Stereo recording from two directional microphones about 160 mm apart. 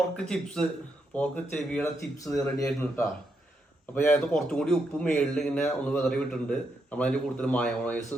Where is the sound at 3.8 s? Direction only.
10° left (ahead or behind).